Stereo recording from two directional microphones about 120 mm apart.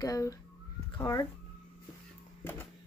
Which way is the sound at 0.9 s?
40° left (ahead or behind).